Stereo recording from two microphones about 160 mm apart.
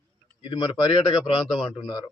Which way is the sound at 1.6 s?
25° left (ahead or behind).